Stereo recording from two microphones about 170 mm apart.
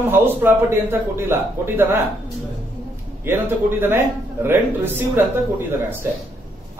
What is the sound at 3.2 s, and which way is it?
A man's voice, 10° right (ahead or behind).